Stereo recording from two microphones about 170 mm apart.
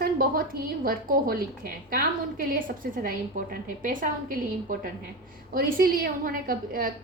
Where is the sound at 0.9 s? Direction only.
60° right (ahead or behind).